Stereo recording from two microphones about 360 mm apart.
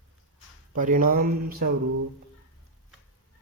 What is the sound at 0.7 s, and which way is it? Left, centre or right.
Speech, right.